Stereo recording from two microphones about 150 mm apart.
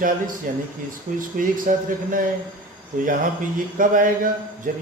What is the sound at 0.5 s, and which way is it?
A man's voice, 65° right (ahead or behind).